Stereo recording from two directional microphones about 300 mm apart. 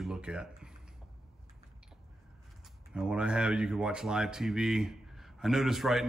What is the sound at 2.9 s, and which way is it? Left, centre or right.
Speech, centre.